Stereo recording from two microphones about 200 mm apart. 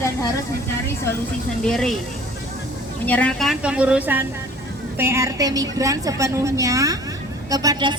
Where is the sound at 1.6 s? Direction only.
Centre (ahead or behind).